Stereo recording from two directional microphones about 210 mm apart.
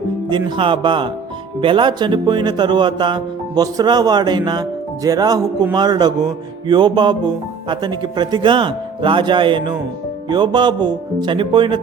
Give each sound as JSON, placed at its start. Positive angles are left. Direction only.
{"t": 0.3, "sound": "music", "side_deg": -20}